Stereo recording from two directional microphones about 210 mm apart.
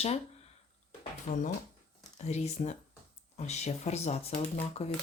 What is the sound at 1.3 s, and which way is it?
Speech, 25° left (ahead or behind).